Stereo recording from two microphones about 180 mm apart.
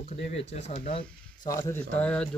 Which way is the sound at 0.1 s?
35° left (ahead or behind).